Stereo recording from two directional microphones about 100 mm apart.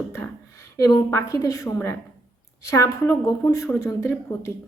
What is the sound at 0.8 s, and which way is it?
A woman's voice, 30° left (ahead or behind).